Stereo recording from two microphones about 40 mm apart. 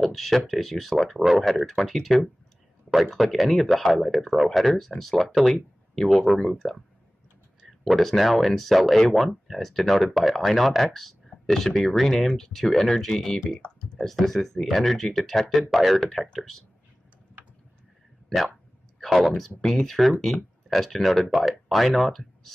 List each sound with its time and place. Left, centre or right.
0.0 s speech: centre
1.1 s speech: centre
1.7 s speech: centre
7.8 s speech: centre
9.6 s speech: centre
12.2 s speech: centre
18.9 s speech: centre